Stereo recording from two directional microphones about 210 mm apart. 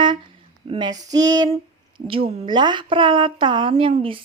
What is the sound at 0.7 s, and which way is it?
A woman's voice, 20° right (ahead or behind).